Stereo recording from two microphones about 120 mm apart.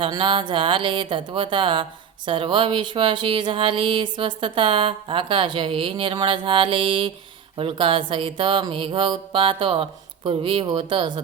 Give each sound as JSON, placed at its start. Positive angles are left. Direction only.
{"t": 0.0, "sound": "speech", "side_deg": -45}